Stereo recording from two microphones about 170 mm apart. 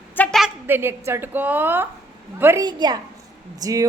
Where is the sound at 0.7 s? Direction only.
15° right (ahead or behind).